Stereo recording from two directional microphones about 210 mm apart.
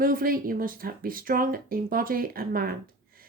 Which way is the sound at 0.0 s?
45° right (ahead or behind).